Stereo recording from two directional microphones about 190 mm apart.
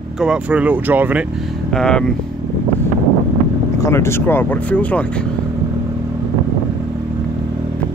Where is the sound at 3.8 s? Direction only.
15° left (ahead or behind).